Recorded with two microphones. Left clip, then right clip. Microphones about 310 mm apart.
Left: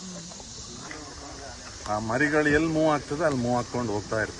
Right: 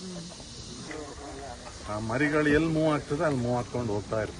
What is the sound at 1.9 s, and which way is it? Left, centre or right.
Speech, left.